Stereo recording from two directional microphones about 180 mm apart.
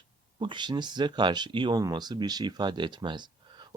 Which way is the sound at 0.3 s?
25° right (ahead or behind).